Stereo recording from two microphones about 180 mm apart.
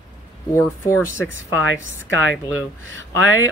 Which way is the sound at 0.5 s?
15° left (ahead or behind).